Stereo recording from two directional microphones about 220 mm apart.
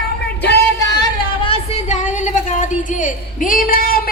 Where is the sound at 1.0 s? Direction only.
25° left (ahead or behind).